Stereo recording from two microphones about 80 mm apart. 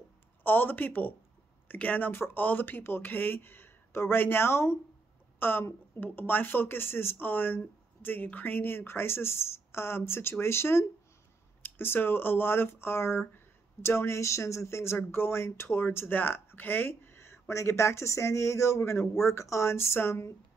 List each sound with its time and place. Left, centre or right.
0.4 s speech: left